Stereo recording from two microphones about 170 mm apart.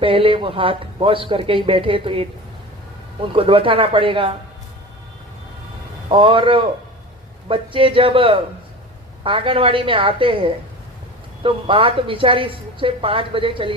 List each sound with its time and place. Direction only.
0.0 s a woman's voice: 30° right (ahead or behind)
3.3 s a woman's voice: 30° right (ahead or behind)
6.1 s a woman's voice: 30° right (ahead or behind)